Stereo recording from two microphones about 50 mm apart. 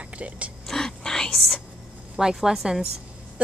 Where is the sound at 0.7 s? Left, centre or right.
Centre.